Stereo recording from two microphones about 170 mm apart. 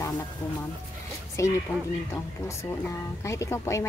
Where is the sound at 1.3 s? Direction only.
15° left (ahead or behind).